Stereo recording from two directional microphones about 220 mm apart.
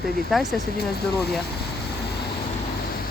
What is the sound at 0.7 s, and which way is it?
Speech, 45° left (ahead or behind).